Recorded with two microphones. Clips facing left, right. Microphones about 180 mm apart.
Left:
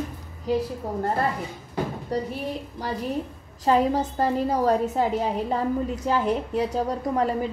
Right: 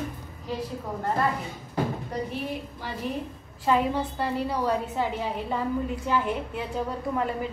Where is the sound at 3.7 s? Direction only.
40° left (ahead or behind).